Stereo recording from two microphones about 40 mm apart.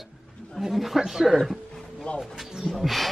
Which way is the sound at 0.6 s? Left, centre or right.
Centre.